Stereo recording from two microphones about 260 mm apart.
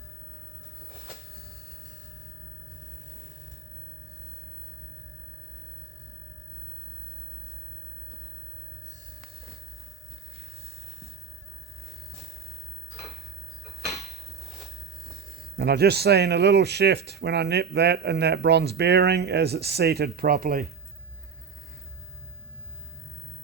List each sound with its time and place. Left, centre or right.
15.5 s speech: right